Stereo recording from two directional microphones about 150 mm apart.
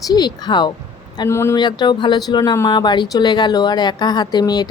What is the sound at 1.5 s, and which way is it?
A woman's voice, 30° left (ahead or behind).